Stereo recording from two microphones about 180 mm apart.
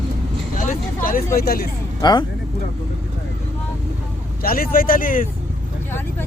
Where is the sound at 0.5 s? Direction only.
50° left (ahead or behind).